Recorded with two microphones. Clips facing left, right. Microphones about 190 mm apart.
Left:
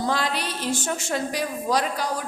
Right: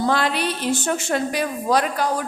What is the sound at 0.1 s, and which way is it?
A woman's voice, 60° right (ahead or behind).